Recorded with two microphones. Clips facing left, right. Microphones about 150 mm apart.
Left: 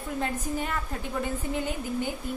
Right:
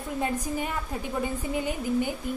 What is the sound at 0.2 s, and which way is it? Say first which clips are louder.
Speech: right 2 dB; 15° right (ahead or behind).